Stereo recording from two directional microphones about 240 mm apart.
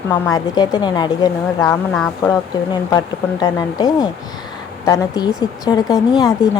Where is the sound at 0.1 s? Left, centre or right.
Centre.